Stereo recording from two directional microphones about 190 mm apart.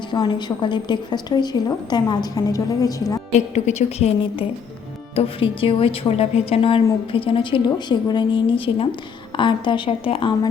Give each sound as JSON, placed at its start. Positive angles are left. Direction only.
{"t": 0.1, "sound": "a woman's voice", "side_deg": 25}
{"t": 3.3, "sound": "a woman's voice", "side_deg": 35}